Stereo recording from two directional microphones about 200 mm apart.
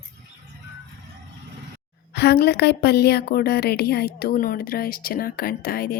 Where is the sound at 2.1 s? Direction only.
55° left (ahead or behind).